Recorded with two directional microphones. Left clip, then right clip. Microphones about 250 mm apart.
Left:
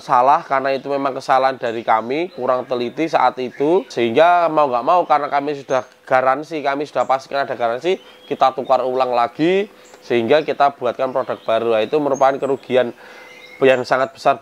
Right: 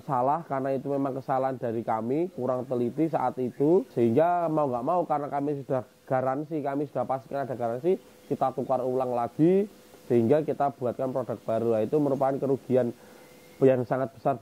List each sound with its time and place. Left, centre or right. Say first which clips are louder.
0.1 s speech: left 13 dB; centre